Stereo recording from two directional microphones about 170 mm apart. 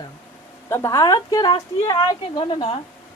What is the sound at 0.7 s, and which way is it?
A woman's voice, 20° left (ahead or behind).